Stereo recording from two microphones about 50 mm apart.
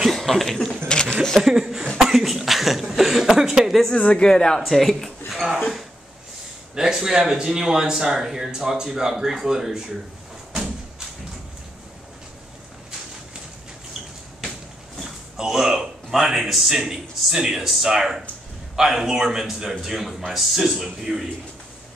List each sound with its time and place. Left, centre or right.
0.1 s speech: centre
1.0 s a sound: centre
1.4 s chuckle: centre
1.9 s cough: centre
3.9 s speech: left
4.6 s a man's voice: centre
6.7 s a man's voice: centre
15.3 s a man's voice: centre